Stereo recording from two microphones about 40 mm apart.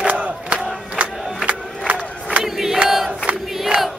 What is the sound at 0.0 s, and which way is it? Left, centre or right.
Battle cry, right.